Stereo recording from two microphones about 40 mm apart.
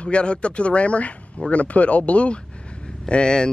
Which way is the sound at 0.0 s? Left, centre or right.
Left.